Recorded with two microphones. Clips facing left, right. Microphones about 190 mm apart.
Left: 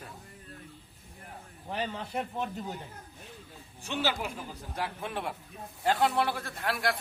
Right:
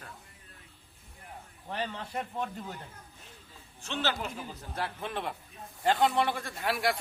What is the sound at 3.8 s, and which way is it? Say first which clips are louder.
Speech: left 1 dB; 10° left (ahead or behind).